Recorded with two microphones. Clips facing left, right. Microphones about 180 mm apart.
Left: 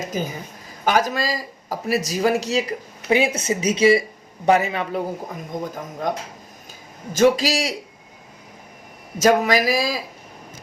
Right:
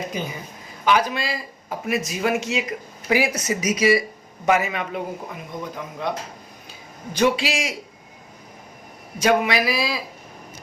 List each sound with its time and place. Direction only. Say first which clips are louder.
0.0 s speech: left 2 dB; 45° left (ahead or behind)
3.1 s speech: left 2 dB; 25° left (ahead or behind)
9.2 s speech: left 3 dB; 40° left (ahead or behind)